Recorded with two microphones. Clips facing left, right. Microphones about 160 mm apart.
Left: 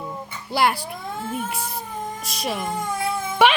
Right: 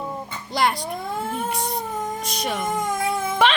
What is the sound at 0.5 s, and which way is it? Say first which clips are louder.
Speech: left 1 dB; 5° left (ahead or behind).